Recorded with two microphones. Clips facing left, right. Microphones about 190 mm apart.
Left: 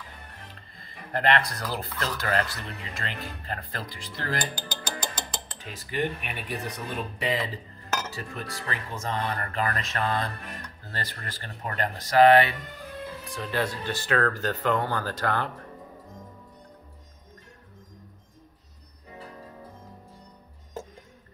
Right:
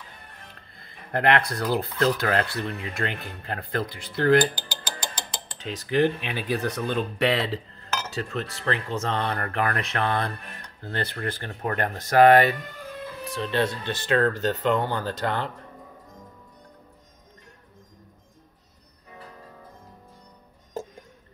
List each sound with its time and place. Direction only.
0.7 s speech: 60° right (ahead or behind)
5.6 s cutlery: 85° right
6.5 s speech: 90° right; by 12.5 s 45° right (ahead or behind)
13.4 s speech: 25° right (ahead or behind)